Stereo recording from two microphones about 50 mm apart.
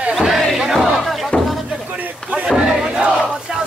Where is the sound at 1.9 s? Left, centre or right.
Right.